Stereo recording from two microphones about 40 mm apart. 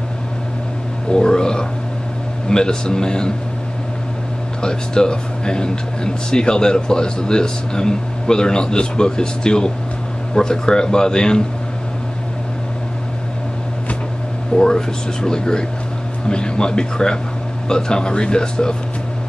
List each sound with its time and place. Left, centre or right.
1.1 s speech: centre
4.6 s speech: centre
14.5 s speech: left